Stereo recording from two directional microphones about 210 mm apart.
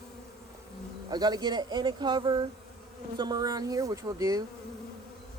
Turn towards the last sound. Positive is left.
turn(degrees=-15)  # may be behind; listen again after turning